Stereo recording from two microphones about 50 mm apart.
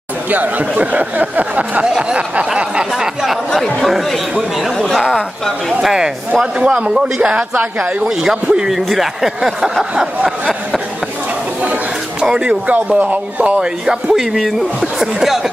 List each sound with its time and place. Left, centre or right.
0.3 s speech: right
1.9 s speech: centre
3.5 s speech: centre
5.7 s a man's voice: centre; by 8.1 s right
8.2 s speech: centre
11.6 s a sound: right
12.3 s a man's voice: centre
12.6 s a man's voice: right
14.1 s speech: centre